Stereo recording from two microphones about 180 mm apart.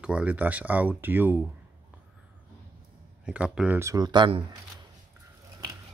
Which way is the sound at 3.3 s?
5° right (ahead or behind).